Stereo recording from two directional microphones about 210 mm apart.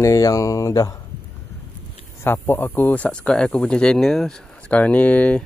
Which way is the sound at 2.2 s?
10° left (ahead or behind).